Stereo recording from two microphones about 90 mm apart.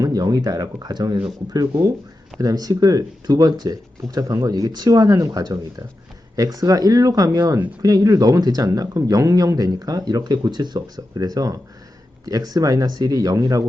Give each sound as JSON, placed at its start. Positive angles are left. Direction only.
{"t": 0.0, "sound": "speech", "side_deg": -45}
{"t": 12.3, "sound": "speech", "side_deg": -45}